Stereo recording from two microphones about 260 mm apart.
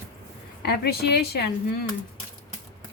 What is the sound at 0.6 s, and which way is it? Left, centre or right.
Speech, left.